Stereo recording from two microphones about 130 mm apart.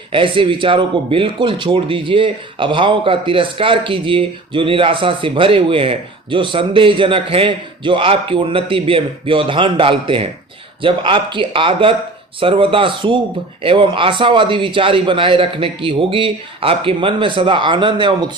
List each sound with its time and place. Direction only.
0.1 s a man's voice: 40° right (ahead or behind)